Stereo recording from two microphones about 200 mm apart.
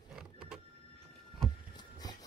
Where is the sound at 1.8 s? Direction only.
20° left (ahead or behind).